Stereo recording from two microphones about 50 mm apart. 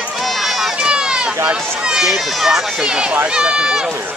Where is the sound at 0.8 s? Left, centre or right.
Centre.